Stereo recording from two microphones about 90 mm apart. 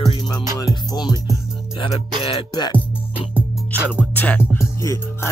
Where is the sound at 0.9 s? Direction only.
50° left (ahead or behind).